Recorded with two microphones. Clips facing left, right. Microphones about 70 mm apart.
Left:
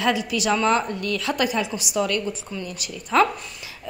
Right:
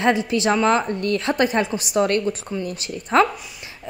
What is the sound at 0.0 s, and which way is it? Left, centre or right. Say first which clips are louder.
A woman's voice: right 4 dB; right.